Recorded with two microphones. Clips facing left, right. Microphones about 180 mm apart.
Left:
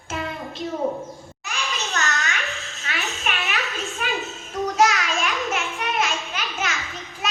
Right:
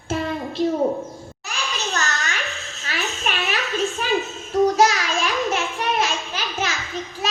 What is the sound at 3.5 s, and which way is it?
Children playing, centre (ahead or behind).